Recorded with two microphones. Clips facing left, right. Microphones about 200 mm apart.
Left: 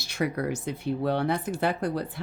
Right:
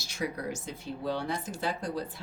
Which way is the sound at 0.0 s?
60° left (ahead or behind).